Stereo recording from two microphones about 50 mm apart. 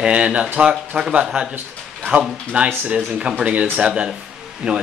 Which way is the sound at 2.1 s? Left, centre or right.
Right.